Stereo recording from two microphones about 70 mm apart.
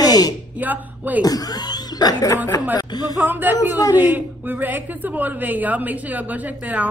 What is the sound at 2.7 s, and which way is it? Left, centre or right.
Speech, left.